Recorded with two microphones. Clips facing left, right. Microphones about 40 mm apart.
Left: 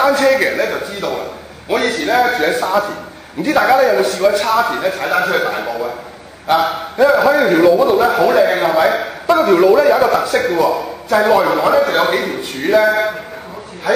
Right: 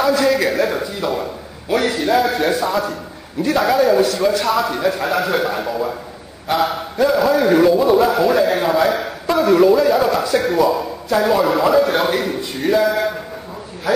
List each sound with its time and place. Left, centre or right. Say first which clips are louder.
0.2 s a man's voice: left 3 dB; centre
12.8 s a man's voice: left 3 dB; centre